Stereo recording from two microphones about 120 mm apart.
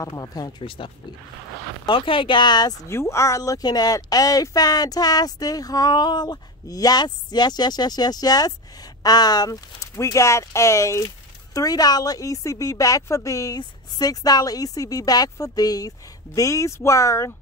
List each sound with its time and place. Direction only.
0.0 s speech: 30° left (ahead or behind)
2.9 s speech: 25° left (ahead or behind)